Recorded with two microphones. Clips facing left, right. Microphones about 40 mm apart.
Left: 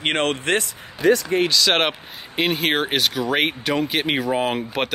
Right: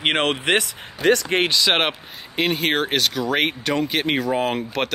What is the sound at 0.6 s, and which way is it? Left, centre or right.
Speech, right.